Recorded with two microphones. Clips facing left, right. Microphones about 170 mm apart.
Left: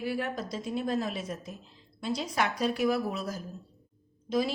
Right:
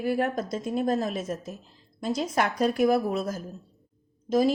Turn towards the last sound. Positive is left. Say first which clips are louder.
# right 6 dB
turn(degrees=-45)  # may be behind; listen again after turning